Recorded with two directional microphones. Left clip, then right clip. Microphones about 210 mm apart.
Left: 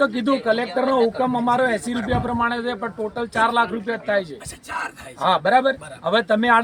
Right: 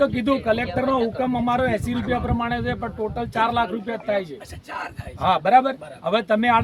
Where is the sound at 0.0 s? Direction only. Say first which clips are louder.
Left 1 dB; 5° left (ahead or behind).